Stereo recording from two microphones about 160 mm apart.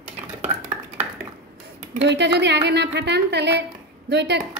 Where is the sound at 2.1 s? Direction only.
90° right.